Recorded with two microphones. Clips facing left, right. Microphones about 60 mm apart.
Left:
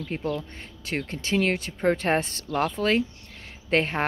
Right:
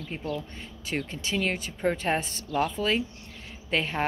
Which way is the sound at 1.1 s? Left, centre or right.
Left.